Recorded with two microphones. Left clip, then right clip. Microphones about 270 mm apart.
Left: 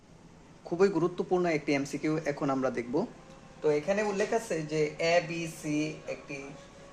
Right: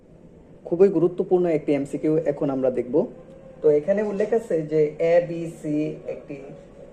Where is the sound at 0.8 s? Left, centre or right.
Centre.